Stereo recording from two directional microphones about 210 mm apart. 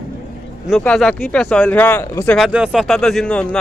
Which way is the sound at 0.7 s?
5° left (ahead or behind).